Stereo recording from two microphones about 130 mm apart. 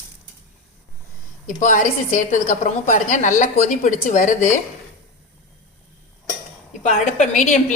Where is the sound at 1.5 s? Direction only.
80° left.